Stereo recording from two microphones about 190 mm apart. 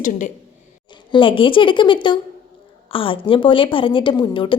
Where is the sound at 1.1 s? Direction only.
25° left (ahead or behind).